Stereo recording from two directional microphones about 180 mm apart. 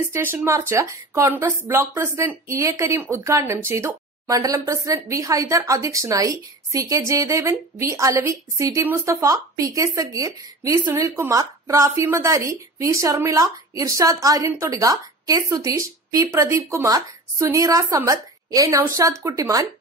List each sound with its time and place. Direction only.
0.1 s speech: 10° right (ahead or behind)